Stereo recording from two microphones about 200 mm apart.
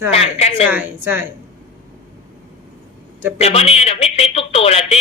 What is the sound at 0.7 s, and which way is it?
Speech, 10° right (ahead or behind).